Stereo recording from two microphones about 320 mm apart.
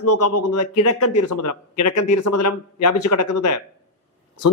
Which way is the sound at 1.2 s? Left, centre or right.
Left.